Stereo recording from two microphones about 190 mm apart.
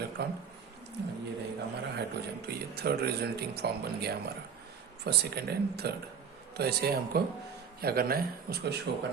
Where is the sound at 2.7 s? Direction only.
60° right (ahead or behind).